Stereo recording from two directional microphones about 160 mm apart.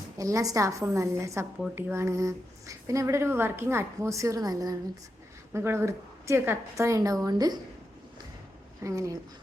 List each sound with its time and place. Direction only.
0.2 s a woman's voice: 20° right (ahead or behind)
8.8 s a woman's voice: 20° right (ahead or behind)